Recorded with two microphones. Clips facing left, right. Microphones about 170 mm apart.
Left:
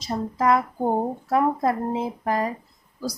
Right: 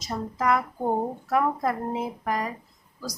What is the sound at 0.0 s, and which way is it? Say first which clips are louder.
Speech: left 4 dB; 30° left (ahead or behind).